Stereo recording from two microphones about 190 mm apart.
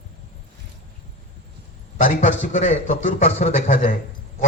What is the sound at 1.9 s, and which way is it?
A man's voice, 40° left (ahead or behind).